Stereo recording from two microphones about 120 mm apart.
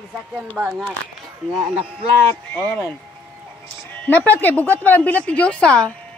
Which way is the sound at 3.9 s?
15° left (ahead or behind).